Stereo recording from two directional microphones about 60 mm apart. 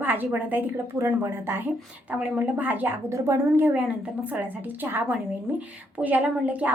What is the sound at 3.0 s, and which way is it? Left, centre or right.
Speech, right.